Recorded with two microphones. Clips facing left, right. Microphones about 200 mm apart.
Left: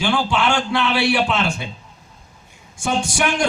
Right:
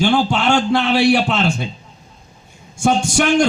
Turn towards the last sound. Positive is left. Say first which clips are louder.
# right 6 dB
turn(degrees=-45)  # may be behind; listen again after turning